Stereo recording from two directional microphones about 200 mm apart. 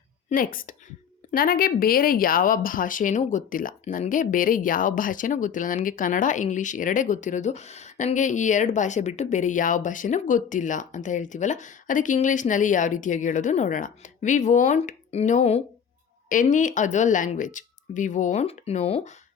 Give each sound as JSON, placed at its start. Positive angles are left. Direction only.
{"t": 0.3, "sound": "a woman's voice", "side_deg": 45}